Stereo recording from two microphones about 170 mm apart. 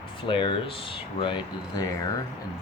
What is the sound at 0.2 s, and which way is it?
Speech, 30° left (ahead or behind).